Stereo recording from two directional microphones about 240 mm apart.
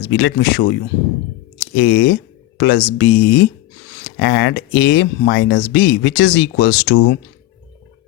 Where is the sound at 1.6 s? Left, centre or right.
Left.